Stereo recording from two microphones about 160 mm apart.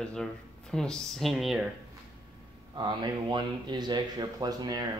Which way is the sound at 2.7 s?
30° right (ahead or behind).